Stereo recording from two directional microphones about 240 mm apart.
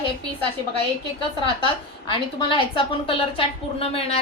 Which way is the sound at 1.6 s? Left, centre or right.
Centre.